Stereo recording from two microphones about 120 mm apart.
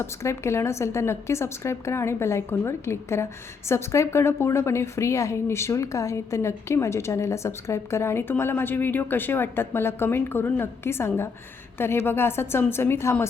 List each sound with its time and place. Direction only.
0.0 s a woman's voice: 25° left (ahead or behind)